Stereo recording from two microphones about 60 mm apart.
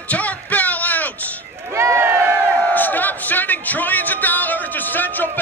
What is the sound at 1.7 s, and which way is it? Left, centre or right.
Run, right.